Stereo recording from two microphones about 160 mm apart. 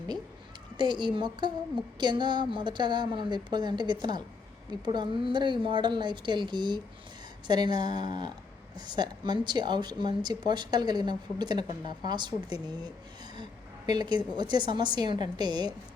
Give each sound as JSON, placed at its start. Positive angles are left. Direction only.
{"t": 0.8, "sound": "a woman's voice", "side_deg": -30}